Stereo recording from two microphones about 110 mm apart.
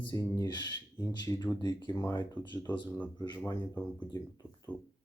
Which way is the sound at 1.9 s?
20° left (ahead or behind).